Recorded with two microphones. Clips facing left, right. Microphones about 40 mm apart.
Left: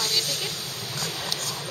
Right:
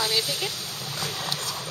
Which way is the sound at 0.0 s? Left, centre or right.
Centre.